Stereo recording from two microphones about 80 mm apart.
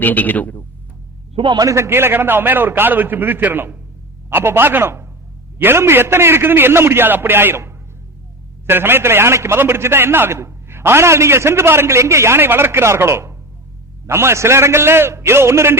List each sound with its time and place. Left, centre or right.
0.0 s a man's voice: left
1.5 s a man's voice: right